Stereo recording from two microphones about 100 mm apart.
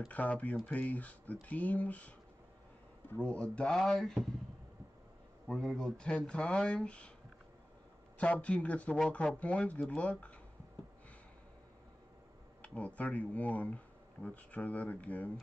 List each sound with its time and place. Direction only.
0.1 s speech: 15° left (ahead or behind)
5.5 s speech: 5° left (ahead or behind)
8.2 s speech: 15° left (ahead or behind)
12.6 s speech: 15° left (ahead or behind)